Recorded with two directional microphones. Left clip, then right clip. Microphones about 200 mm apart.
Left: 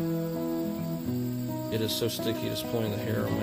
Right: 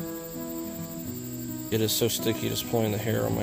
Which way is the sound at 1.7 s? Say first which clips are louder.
Right 5 dB; 20° right (ahead or behind).